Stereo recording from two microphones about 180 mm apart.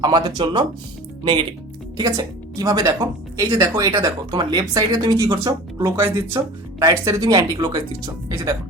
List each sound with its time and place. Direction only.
0.0 s a woman's voice: 20° right (ahead or behind)